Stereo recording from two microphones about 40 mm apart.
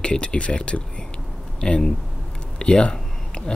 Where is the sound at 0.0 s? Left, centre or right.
Left.